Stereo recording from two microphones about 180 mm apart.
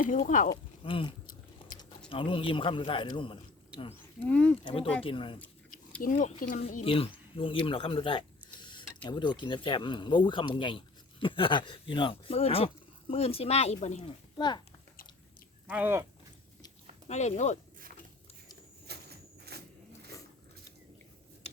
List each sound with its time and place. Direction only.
0.3 s speech: 45° left (ahead or behind)
0.5 s speech: 25° left (ahead or behind)
4.2 s speech: 5° left (ahead or behind)
4.6 s speech: 30° left (ahead or behind)
6.0 s speech: 45° left (ahead or behind)
14.3 s speech: 25° left (ahead or behind)
15.6 s speech: 10° right (ahead or behind)
17.1 s speech: 40° left (ahead or behind)
18.9 s a sound: 65° right (ahead or behind)